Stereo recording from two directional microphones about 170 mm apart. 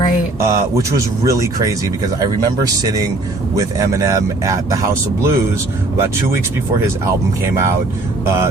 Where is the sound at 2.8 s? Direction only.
20° right (ahead or behind).